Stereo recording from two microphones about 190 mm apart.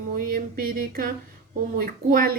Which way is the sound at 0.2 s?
50° right (ahead or behind).